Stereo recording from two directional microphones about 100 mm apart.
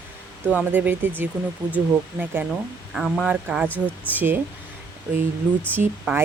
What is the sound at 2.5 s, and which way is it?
Speech, centre (ahead or behind).